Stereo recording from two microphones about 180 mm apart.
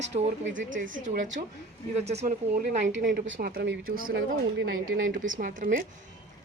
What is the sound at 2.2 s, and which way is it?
Speech, 45° right (ahead or behind).